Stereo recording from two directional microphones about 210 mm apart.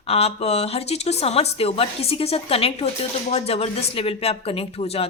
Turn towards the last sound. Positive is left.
turn(degrees=30)  # may be behind; listen again after turning